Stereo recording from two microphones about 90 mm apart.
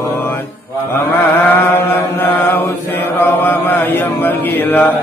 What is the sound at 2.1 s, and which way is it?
Mantra, 20° left (ahead or behind).